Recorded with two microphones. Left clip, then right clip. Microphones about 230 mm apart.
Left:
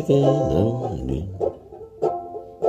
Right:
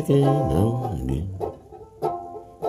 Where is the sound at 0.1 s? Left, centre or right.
Right.